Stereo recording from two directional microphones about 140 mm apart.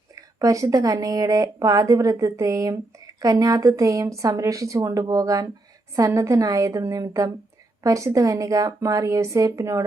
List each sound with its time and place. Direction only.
0.2 s speech: 25° right (ahead or behind)